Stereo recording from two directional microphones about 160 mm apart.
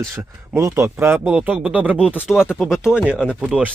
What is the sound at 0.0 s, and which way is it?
Speech, 15° right (ahead or behind).